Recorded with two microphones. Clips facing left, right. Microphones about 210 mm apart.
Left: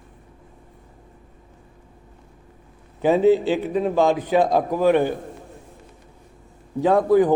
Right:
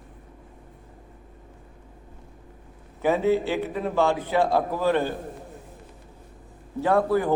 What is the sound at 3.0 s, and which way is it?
A man's voice, 15° left (ahead or behind).